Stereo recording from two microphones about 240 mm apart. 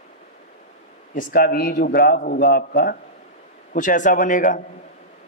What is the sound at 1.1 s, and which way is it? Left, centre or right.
A man's voice, left.